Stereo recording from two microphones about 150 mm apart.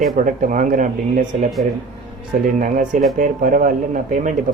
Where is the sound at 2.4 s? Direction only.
65° right (ahead or behind).